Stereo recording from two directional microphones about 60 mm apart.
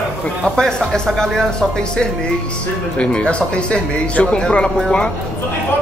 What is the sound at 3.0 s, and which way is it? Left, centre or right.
Speech, centre.